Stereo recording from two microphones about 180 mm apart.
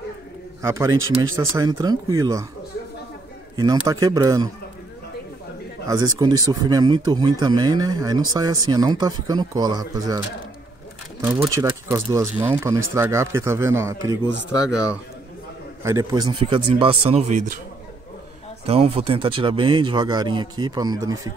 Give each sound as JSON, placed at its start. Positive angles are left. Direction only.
{"t": 0.6, "sound": "a man's voice", "side_deg": -15}
{"t": 3.5, "sound": "speech", "side_deg": -20}
{"t": 5.9, "sound": "speech", "side_deg": -20}
{"t": 11.4, "sound": "speech", "side_deg": -20}
{"t": 15.8, "sound": "speech", "side_deg": -20}
{"t": 18.7, "sound": "speech", "side_deg": -35}